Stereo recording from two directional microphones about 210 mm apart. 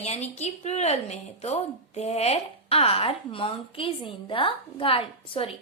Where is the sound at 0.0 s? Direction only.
30° left (ahead or behind).